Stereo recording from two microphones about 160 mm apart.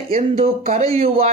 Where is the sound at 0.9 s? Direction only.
40° right (ahead or behind).